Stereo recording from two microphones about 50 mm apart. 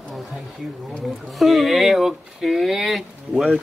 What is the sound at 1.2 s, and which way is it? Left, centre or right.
Speech, centre.